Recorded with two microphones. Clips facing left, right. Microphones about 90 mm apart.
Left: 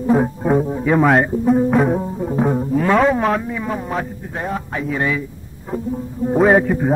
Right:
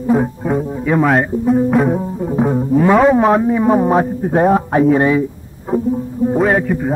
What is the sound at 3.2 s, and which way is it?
Speech, 30° right (ahead or behind).